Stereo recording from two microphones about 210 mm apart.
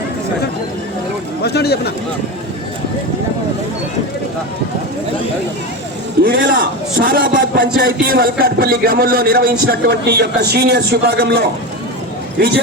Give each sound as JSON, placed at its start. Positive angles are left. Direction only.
{"t": 1.5, "sound": "speech", "side_deg": 50}
{"t": 6.2, "sound": "a man's voice", "side_deg": -45}